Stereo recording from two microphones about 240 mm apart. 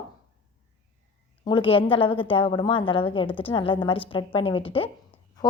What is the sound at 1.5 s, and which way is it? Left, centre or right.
A woman's voice, left.